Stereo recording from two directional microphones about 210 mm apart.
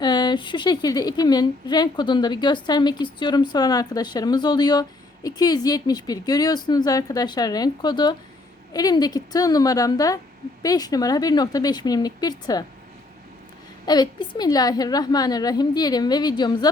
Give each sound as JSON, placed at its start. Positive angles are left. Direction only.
{"t": 0.0, "sound": "a woman's voice", "side_deg": 20}
{"t": 13.8, "sound": "a woman's voice", "side_deg": 20}